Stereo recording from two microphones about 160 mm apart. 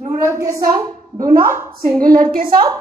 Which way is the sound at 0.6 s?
60° right (ahead or behind).